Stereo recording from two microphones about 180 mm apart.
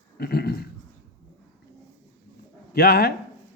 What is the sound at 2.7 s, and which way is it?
Speech, 60° left (ahead or behind).